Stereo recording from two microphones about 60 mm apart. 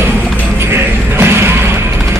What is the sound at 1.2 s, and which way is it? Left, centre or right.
Music, right.